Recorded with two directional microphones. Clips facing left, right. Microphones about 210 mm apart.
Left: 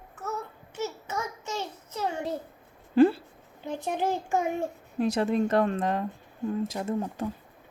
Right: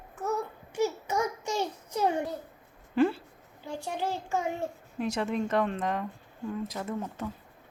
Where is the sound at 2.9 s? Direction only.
35° left (ahead or behind).